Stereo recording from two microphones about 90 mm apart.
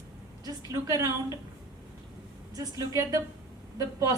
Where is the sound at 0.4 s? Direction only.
40° right (ahead or behind).